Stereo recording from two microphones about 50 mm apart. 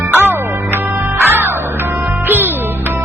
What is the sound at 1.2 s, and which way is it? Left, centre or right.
Music, right.